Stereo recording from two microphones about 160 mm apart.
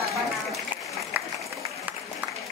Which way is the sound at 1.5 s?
20° right (ahead or behind).